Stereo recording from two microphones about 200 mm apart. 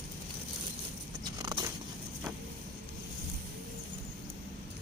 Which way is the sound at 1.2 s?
20° right (ahead or behind).